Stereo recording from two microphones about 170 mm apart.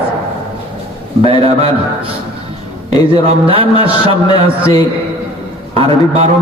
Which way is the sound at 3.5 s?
35° right (ahead or behind).